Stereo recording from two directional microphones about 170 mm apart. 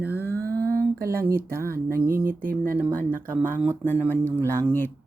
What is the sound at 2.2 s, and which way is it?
Speech, 55° right (ahead or behind).